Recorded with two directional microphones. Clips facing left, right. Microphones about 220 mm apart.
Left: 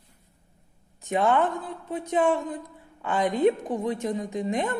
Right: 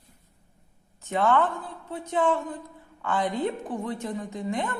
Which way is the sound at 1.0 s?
15° left (ahead or behind).